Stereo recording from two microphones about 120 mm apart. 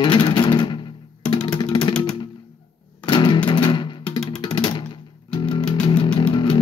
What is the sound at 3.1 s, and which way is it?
Music, 40° left (ahead or behind).